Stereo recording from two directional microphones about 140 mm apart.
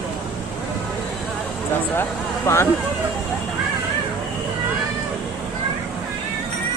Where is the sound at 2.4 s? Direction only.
20° left (ahead or behind).